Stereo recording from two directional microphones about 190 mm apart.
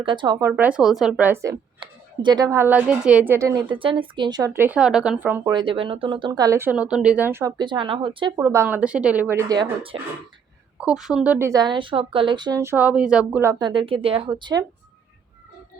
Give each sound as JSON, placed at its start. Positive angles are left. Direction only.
{"t": 0.0, "sound": "a woman's voice", "side_deg": -25}
{"t": 0.5, "sound": "speech", "side_deg": -5}
{"t": 3.7, "sound": "speech", "side_deg": -25}
{"t": 5.5, "sound": "speech", "side_deg": -25}
{"t": 7.6, "sound": "a woman's voice", "side_deg": -25}
{"t": 8.4, "sound": "speech", "side_deg": -15}
{"t": 10.8, "sound": "a woman's voice", "side_deg": -5}